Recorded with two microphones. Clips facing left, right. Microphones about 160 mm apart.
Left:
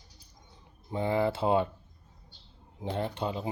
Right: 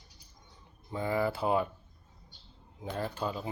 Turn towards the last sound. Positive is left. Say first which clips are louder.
# left 2 dB
turn(degrees=25)  # may be behind; listen again after turning